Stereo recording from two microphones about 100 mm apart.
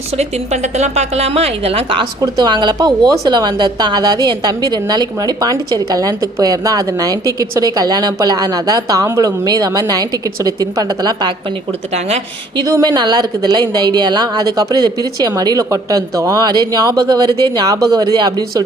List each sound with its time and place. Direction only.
0.2 s a woman's voice: 90° right; by 2.0 s 65° right (ahead or behind)
2.2 s a woman's voice: 45° right (ahead or behind)
11.9 s a woman's voice: 90° right
12.5 s a woman's voice: 40° right (ahead or behind)